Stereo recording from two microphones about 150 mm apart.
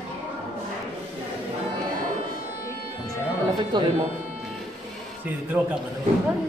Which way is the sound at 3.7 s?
30° right (ahead or behind).